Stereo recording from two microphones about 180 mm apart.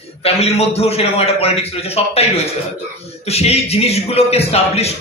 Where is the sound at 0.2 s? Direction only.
35° left (ahead or behind).